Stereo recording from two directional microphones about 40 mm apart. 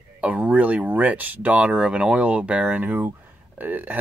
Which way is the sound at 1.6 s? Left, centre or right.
Right.